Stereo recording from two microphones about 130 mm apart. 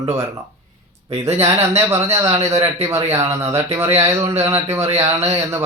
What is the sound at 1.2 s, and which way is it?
Speech, 20° right (ahead or behind).